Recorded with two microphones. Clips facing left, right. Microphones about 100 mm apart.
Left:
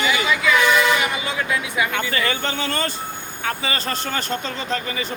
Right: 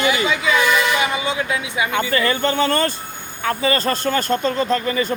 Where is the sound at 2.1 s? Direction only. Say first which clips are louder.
Right 5 dB; 40° right (ahead or behind).